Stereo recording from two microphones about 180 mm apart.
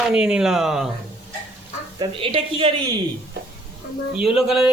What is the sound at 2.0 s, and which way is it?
Speech, 30° right (ahead or behind).